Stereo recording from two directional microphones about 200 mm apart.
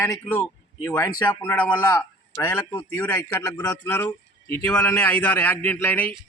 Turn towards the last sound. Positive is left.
turn(degrees=10)  # may be behind; listen again after turning